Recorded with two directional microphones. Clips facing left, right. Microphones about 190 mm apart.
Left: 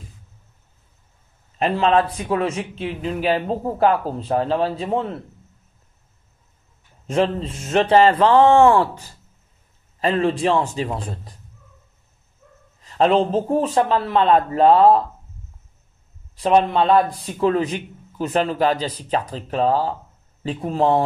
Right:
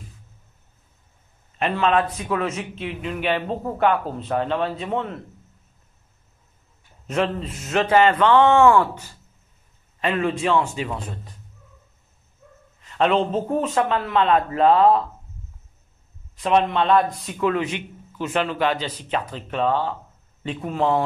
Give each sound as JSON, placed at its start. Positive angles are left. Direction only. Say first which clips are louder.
{"t": 1.6, "sound": "a man's voice", "louder": "left 3 dB", "side_deg": 30}
{"t": 7.1, "sound": "a man's voice", "louder": "left 3 dB", "side_deg": 30}
{"t": 12.8, "sound": "a man's voice", "louder": "left 3 dB", "side_deg": 35}
{"t": 16.3, "sound": "a man's voice", "louder": "left 3 dB", "side_deg": 35}